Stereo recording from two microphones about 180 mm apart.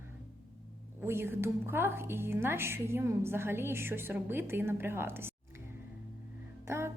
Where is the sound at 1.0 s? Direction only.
15° right (ahead or behind).